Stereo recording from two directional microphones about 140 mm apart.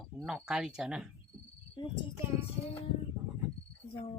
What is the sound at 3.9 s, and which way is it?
Speech, 40° left (ahead or behind).